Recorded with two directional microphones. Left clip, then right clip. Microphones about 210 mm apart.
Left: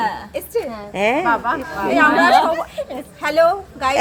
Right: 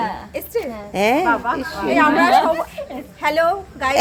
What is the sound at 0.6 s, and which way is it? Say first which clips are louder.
Speech: even; 20° right (ahead or behind).